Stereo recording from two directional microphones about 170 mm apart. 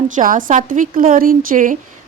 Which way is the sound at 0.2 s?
50° right (ahead or behind).